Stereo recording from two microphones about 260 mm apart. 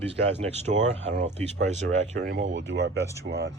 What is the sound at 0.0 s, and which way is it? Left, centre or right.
Speech, right.